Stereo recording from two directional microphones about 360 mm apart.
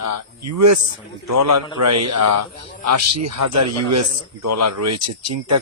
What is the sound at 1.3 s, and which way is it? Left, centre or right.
A man's voice, right.